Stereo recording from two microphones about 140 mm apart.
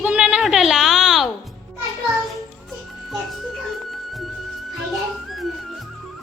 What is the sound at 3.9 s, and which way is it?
Music, centre (ahead or behind).